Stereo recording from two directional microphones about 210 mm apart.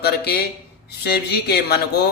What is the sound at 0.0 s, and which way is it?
Mantra, 50° left (ahead or behind).